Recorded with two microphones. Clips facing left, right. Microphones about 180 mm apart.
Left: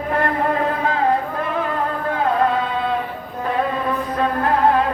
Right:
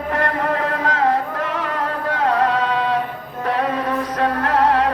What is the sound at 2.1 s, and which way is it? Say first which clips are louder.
Music: even; 90° right.